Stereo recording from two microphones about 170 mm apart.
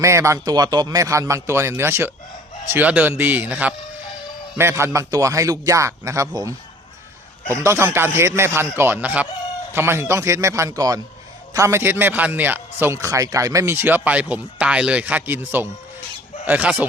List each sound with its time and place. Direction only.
0.0 s a man's voice: 15° right (ahead or behind)